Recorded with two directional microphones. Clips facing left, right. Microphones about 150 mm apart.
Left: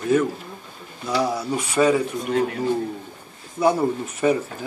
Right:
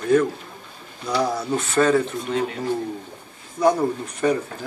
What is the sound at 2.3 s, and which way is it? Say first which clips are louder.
Speech: left 2 dB; 55° left (ahead or behind).